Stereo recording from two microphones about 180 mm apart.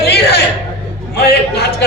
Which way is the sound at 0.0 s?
65° left (ahead or behind).